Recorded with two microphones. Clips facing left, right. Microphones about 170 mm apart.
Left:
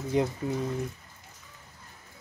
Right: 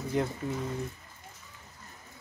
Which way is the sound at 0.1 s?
15° left (ahead or behind).